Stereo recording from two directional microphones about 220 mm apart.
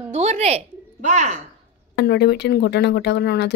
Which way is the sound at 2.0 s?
50° left (ahead or behind).